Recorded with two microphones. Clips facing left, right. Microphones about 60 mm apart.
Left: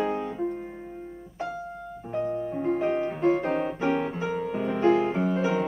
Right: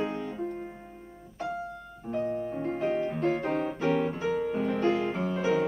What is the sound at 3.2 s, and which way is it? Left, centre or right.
Music, centre.